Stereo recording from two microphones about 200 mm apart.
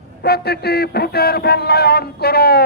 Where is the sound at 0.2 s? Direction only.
55° left (ahead or behind).